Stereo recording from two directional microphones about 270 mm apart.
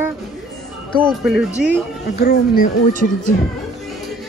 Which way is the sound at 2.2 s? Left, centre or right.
Left.